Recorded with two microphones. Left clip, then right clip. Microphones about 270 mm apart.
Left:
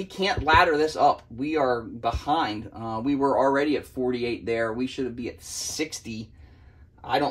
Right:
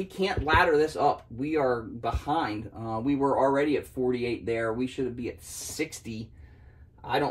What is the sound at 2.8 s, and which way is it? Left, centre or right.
Speech, centre.